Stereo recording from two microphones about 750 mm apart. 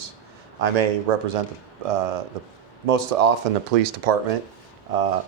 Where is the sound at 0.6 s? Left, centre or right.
Right.